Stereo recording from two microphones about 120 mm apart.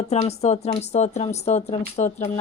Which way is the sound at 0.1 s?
60° left (ahead or behind).